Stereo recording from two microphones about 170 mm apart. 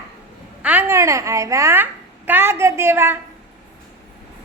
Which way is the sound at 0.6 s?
10° right (ahead or behind).